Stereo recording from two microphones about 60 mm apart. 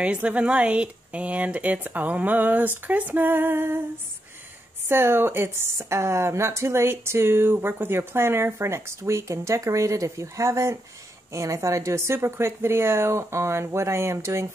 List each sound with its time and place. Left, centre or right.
0.0 s speech: right
2.9 s female singing: right
4.8 s speech: right